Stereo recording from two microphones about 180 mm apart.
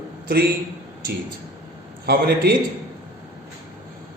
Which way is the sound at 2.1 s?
60° right (ahead or behind).